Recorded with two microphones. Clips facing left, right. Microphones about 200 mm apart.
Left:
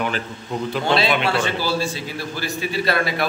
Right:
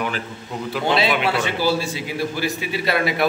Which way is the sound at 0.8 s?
15° right (ahead or behind).